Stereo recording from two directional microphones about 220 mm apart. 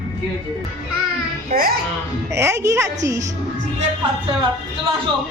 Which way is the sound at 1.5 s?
40° right (ahead or behind).